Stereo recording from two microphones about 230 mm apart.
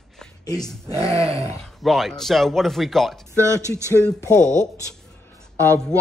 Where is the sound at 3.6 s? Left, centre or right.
Centre.